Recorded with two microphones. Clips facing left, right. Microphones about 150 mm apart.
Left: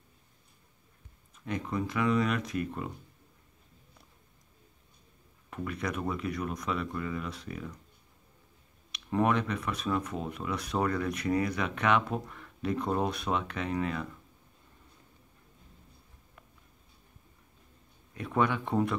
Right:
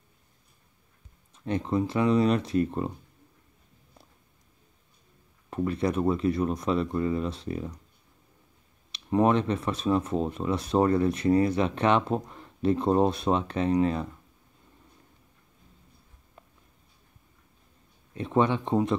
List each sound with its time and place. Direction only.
1.3 s speech: 30° right (ahead or behind)
5.5 s speech: 30° right (ahead or behind)
8.9 s speech: 30° right (ahead or behind)
18.1 s speech: 25° right (ahead or behind)